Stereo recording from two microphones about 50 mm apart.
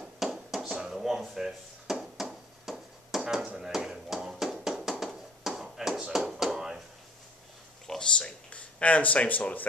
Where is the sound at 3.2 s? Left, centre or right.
Centre.